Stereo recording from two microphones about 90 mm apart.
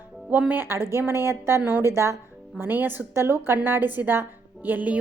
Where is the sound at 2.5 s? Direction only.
20° right (ahead or behind).